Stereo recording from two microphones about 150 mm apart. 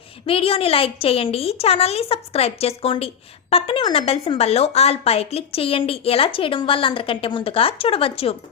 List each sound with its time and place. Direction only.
0.3 s a woman's voice: 40° left (ahead or behind)